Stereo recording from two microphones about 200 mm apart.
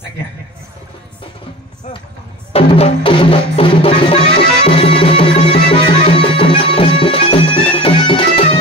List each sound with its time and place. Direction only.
2.5 s music: 30° left (ahead or behind)